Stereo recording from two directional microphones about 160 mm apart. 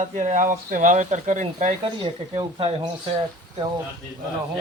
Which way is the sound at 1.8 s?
30° right (ahead or behind).